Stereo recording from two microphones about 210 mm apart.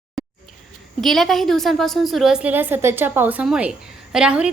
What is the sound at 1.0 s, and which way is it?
A woman's voice, centre (ahead or behind).